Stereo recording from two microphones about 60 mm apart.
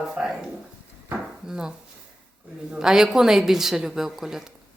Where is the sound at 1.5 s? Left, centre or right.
Centre.